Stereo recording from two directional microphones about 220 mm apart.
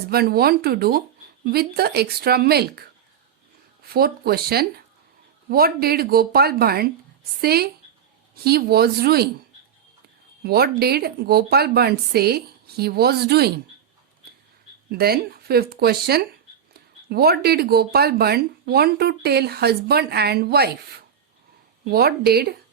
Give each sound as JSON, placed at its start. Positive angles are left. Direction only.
{"t": 0.1, "sound": "speech", "side_deg": -45}
{"t": 3.8, "sound": "speech", "side_deg": -45}
{"t": 10.4, "sound": "speech", "side_deg": -45}
{"t": 14.9, "sound": "speech", "side_deg": -45}
{"t": 21.8, "sound": "speech", "side_deg": -45}